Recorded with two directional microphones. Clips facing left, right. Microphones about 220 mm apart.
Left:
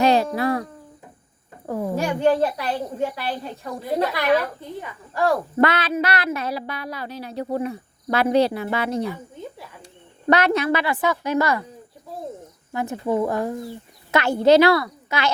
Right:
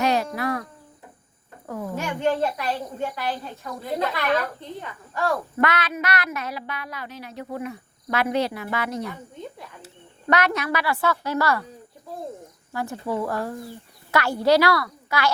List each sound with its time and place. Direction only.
0.0 s a woman's voice: 30° left (ahead or behind)
1.6 s a sound: 30° left (ahead or behind)
4.0 s a woman's voice: 10° left (ahead or behind)
5.1 s speech: 35° left (ahead or behind)
10.2 s a woman's voice: 30° left (ahead or behind)
12.7 s a woman's voice: 20° left (ahead or behind)